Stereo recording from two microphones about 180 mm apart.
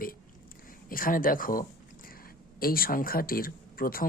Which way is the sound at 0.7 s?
50° left (ahead or behind).